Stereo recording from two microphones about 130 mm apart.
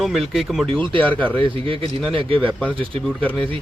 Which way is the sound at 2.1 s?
45° right (ahead or behind).